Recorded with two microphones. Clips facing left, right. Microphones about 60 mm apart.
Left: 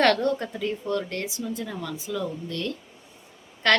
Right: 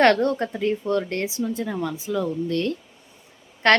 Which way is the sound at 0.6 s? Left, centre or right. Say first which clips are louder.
Right 8 dB; right.